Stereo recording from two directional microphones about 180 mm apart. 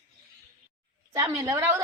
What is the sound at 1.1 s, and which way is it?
Speech, 20° right (ahead or behind).